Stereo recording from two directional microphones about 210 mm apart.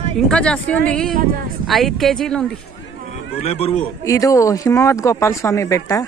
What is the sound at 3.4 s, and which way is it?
Speech, 30° left (ahead or behind).